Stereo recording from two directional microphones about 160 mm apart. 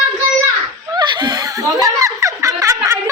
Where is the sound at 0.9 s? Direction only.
25° right (ahead or behind).